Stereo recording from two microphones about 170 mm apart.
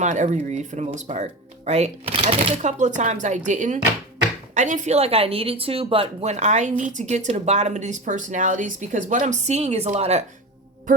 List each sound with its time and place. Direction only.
0.0 s a woman's voice: 45° right (ahead or behind)